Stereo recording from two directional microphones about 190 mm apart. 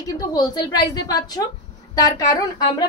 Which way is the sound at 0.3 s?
20° left (ahead or behind).